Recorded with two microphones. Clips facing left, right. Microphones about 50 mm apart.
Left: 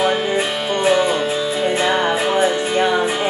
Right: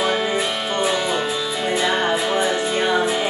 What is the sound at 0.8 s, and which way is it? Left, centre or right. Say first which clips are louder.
Music: left 8 dB; left.